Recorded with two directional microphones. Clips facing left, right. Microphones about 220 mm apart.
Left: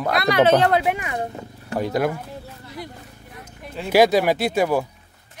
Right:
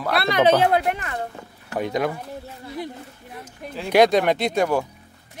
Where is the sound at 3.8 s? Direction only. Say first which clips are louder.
Even; 5° left (ahead or behind).